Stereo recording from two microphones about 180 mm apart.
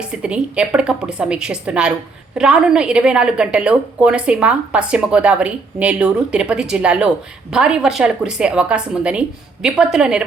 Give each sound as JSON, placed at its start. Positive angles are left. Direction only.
{"t": 0.1, "sound": "a woman's voice", "side_deg": -5}